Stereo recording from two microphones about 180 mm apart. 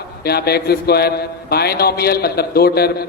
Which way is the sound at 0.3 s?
60° left (ahead or behind).